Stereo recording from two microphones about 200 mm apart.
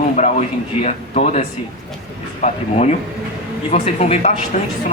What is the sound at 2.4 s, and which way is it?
A man's voice, 35° left (ahead or behind).